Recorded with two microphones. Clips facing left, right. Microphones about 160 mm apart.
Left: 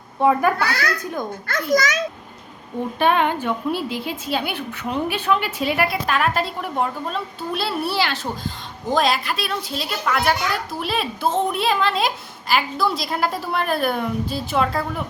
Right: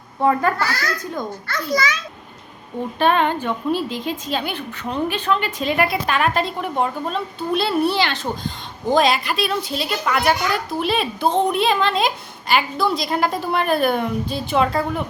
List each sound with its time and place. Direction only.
0.2 s a woman's voice: 10° left (ahead or behind)
1.7 s a child's voice: 45° left (ahead or behind)
3.0 s a woman's voice: 10° left (ahead or behind)